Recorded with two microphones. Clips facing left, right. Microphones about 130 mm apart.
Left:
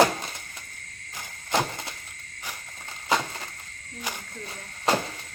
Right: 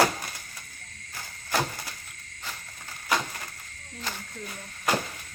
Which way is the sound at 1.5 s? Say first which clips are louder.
Left 2 dB; 20° left (ahead or behind).